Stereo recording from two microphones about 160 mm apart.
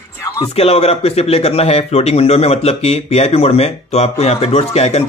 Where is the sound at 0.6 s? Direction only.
40° left (ahead or behind).